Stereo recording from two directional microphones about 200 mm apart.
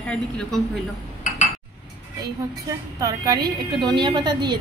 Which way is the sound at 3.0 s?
20° right (ahead or behind).